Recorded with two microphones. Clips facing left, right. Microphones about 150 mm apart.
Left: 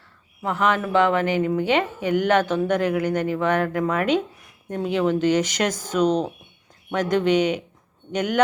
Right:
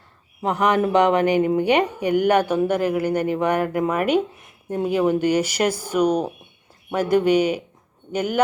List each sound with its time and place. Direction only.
0.4 s a woman's voice: 15° right (ahead or behind)